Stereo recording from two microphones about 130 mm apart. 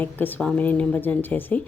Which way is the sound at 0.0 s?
15° left (ahead or behind).